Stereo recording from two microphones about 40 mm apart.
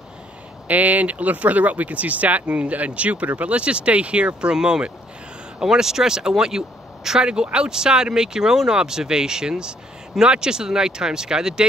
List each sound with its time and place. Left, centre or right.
0.7 s speech: right; by 11.6 s centre